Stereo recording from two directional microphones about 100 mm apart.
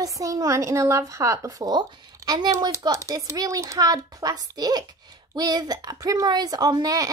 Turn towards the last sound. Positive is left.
turn(degrees=-35)  # may be behind; listen again after turning